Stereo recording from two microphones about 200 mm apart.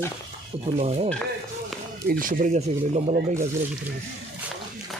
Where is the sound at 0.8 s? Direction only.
30° right (ahead or behind).